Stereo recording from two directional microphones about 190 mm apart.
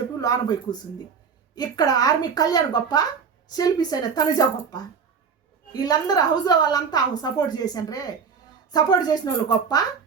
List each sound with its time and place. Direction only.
0.2 s a woman's voice: 20° left (ahead or behind)